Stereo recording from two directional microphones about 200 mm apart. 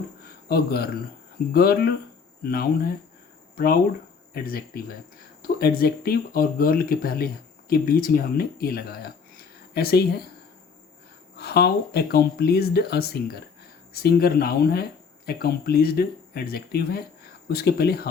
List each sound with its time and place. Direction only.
0.4 s a man's voice: 50° left (ahead or behind)
11.3 s speech: 55° left (ahead or behind)